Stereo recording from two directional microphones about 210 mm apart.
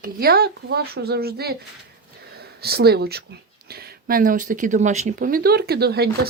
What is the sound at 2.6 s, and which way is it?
Speech, 50° right (ahead or behind).